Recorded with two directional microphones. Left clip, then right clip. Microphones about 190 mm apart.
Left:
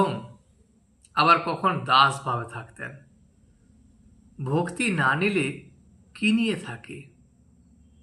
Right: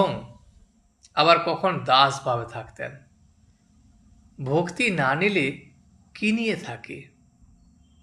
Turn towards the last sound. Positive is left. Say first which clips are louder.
# right 2 dB
turn(degrees=-20)  # may be behind; listen again after turning